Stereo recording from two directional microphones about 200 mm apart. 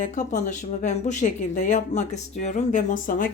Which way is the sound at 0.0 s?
40° left (ahead or behind).